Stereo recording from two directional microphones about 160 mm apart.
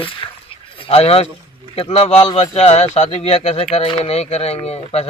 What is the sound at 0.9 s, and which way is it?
Speech, 40° left (ahead or behind).